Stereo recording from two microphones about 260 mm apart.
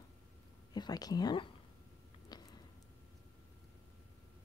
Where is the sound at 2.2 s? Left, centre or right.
Centre.